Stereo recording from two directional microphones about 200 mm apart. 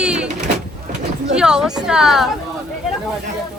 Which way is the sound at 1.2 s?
5° right (ahead or behind).